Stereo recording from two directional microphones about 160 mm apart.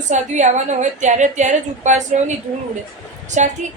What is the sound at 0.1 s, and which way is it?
A woman's voice, 50° right (ahead or behind).